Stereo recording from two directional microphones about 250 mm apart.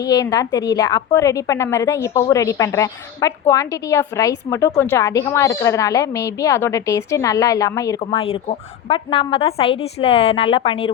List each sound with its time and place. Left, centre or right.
0.0 s a woman's voice: centre